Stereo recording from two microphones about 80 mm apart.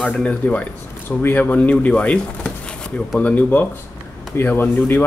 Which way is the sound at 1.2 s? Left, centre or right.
Left.